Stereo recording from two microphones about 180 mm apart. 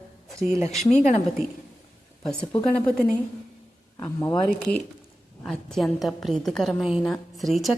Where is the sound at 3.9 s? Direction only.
15° left (ahead or behind).